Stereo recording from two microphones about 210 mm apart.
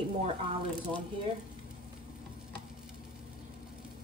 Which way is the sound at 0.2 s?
20° right (ahead or behind).